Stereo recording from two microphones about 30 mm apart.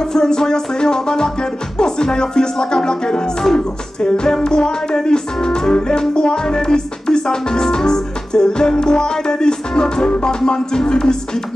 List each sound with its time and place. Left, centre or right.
0.0 s music: centre